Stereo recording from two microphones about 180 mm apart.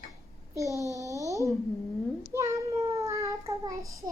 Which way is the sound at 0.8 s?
15° right (ahead or behind).